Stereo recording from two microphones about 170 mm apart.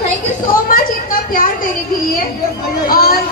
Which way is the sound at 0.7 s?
55° left (ahead or behind).